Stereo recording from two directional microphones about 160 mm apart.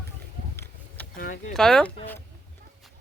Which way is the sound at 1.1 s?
60° left (ahead or behind).